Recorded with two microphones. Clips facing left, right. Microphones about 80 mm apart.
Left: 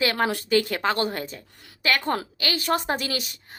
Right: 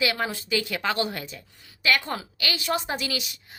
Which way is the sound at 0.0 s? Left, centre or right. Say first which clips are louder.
Left 3 dB; left.